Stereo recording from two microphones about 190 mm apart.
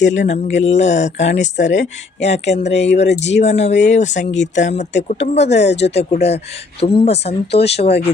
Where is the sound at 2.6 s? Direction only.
65° left (ahead or behind).